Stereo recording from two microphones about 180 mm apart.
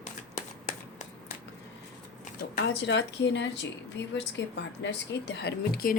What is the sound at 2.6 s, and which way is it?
A woman's voice, 75° left (ahead or behind).